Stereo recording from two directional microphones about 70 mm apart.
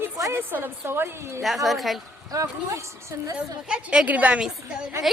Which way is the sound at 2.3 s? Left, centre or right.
Right.